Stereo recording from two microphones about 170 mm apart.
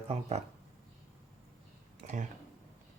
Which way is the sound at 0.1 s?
40° right (ahead or behind).